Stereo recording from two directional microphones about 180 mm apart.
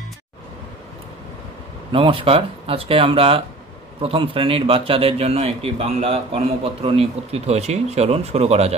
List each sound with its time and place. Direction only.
1.9 s a man's voice: 30° right (ahead or behind)